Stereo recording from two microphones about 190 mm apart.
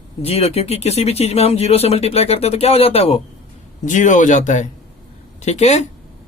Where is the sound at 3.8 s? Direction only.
40° left (ahead or behind).